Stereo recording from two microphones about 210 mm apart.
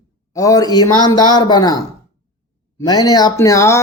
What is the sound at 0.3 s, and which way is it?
Speech, 15° left (ahead or behind).